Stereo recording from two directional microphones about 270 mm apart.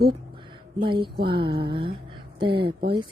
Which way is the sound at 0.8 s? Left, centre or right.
Centre.